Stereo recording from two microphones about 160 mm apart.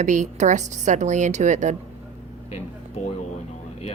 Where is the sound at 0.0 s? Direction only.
50° right (ahead or behind).